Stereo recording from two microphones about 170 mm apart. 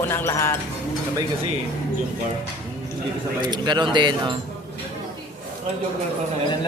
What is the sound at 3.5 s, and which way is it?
Speech, 25° right (ahead or behind).